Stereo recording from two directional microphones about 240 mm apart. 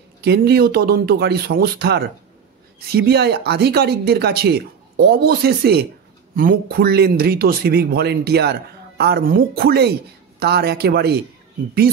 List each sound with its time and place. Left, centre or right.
0.2 s speech: right